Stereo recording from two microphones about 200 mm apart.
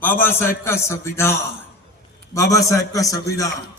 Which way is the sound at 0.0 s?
10° left (ahead or behind).